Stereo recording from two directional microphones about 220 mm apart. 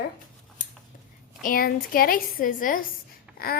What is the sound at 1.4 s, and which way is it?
A woman's voice, 40° left (ahead or behind).